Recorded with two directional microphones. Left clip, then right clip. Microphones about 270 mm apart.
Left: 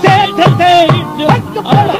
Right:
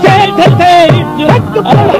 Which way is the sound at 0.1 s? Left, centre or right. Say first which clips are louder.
Right 2 dB; centre.